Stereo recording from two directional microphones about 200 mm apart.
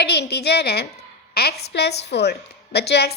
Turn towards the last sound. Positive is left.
turn(degrees=55)  # may be behind; listen again after turning